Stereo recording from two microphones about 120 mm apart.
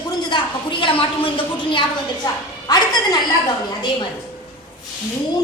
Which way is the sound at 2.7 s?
35° left (ahead or behind).